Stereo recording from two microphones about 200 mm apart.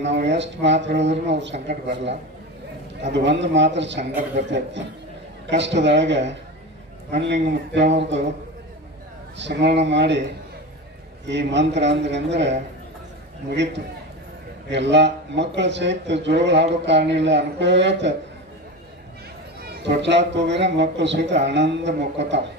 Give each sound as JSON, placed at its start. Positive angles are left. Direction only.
{"t": 0.0, "sound": "speech", "side_deg": -60}
{"t": 9.4, "sound": "speech", "side_deg": -60}
{"t": 11.2, "sound": "speech", "side_deg": -60}
{"t": 19.6, "sound": "speech", "side_deg": -55}